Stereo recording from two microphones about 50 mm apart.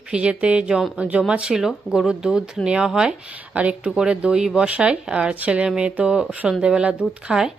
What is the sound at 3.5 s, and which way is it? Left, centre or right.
Speech, right.